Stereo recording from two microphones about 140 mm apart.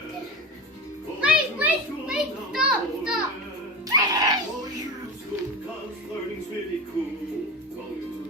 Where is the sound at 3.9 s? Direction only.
25° right (ahead or behind).